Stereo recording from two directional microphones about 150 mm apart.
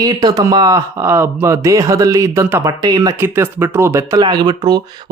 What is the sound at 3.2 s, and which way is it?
Speech, 15° right (ahead or behind).